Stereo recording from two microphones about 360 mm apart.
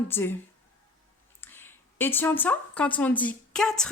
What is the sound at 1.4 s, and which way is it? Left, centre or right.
Speech, centre.